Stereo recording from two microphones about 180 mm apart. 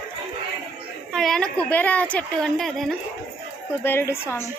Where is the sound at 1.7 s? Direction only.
10° left (ahead or behind).